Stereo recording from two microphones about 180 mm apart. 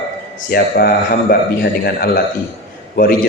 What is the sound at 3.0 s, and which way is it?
Speech, 50° left (ahead or behind).